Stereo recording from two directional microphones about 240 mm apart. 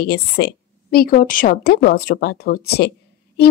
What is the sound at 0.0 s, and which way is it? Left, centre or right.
A woman's voice, left.